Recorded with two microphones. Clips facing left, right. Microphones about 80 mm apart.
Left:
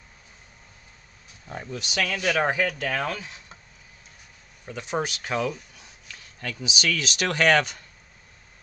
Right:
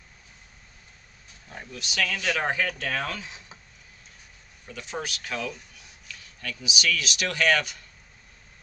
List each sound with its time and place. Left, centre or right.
1.5 s speech: left
2.3 s speech: centre
4.6 s speech: left